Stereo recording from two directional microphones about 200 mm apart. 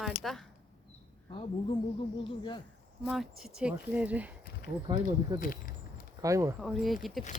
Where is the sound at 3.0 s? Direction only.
Centre (ahead or behind).